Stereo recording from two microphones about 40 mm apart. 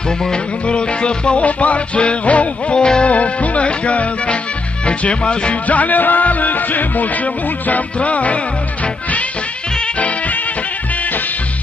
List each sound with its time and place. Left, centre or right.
0.2 s music: left
3.1 s music: left
5.7 s music: left
9.9 s music: left